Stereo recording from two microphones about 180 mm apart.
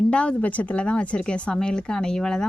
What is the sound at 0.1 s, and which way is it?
Speech, 5° left (ahead or behind).